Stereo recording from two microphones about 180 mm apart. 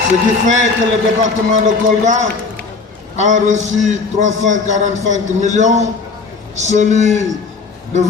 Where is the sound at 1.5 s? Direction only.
40° right (ahead or behind).